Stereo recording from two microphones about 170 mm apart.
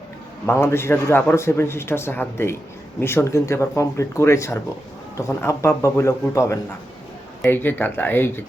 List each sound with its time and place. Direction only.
0.4 s a man's voice: 15° left (ahead or behind)